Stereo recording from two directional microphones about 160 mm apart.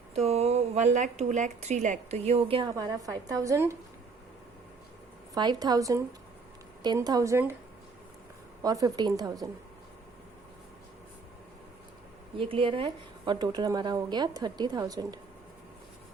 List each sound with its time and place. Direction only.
0.2 s a woman's voice: 40° right (ahead or behind); by 3.8 s 20° right (ahead or behind)
5.3 s a woman's voice: 25° right (ahead or behind)
8.6 s a woman's voice: 25° right (ahead or behind)
12.4 s a woman's voice: 35° right (ahead or behind)